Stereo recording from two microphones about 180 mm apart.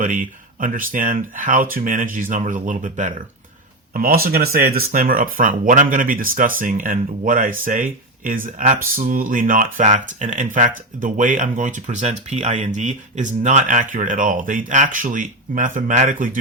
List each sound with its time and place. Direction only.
0.0 s speech: 50° right (ahead or behind)